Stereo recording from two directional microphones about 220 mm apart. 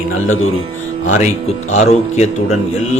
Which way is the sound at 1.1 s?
30° left (ahead or behind).